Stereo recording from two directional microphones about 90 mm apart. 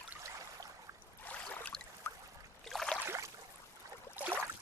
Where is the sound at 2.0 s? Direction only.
20° left (ahead or behind).